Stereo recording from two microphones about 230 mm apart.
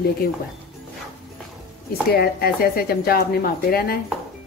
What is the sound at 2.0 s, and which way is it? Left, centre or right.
A woman's voice, left.